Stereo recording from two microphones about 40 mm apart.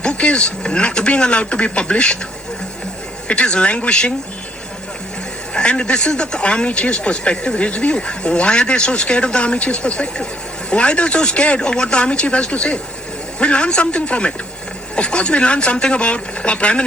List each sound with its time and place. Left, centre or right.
0.0 s speech: left
3.2 s speech: left
5.5 s speech: left